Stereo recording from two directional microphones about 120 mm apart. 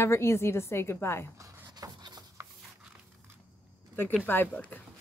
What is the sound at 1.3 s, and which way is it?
Writing, 25° right (ahead or behind).